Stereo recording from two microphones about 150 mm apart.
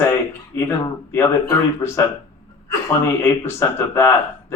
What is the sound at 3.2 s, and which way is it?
A man's voice, 15° left (ahead or behind).